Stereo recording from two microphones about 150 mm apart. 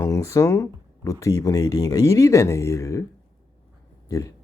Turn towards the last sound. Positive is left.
turn(degrees=20)  # may be behind; listen again after turning